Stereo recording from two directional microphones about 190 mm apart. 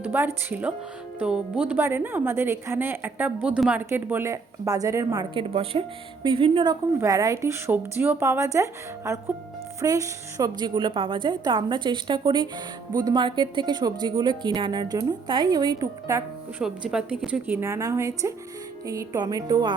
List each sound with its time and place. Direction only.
0.0 s a woman's voice: 10° right (ahead or behind)
5.3 s a woman's voice: 30° right (ahead or behind)
16.6 s a woman's voice: 5° right (ahead or behind); by 19.7 s 20° right (ahead or behind)